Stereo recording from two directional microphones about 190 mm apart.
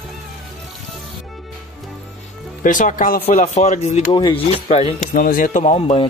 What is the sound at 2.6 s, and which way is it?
Speech, 45° left (ahead or behind).